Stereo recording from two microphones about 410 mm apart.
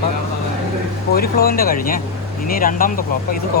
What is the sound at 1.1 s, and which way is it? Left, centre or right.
Speech, left.